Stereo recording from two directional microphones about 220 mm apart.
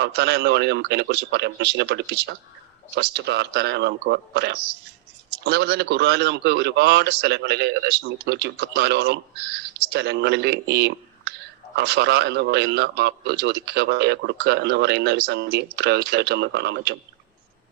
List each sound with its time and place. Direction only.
0.0 s a man's voice: 50° right (ahead or behind)